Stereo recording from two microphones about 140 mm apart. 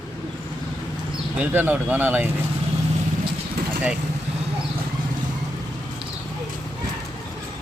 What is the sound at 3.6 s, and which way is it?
Vehicle, 90° right.